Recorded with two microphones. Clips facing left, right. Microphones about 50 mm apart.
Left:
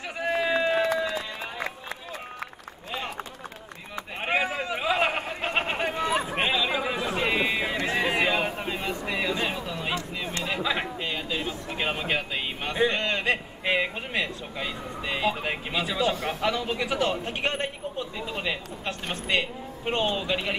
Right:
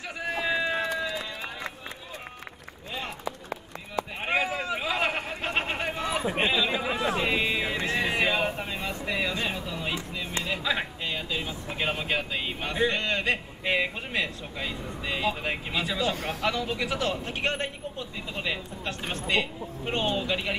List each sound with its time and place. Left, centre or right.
0.4 s run: centre
4.2 s a sound: centre
6.3 s chatter: centre
6.6 s chatter: centre
7.2 s a sound: centre
8.6 s vehicle: centre
10.5 s a sound: centre
16.3 s speech: centre
20.2 s speech: centre